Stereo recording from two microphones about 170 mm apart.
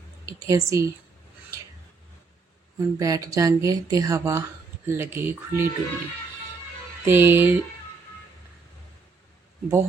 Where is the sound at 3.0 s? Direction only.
20° right (ahead or behind).